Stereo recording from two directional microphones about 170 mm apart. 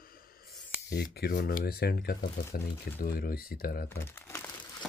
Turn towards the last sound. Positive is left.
turn(degrees=15)  # may be behind; listen again after turning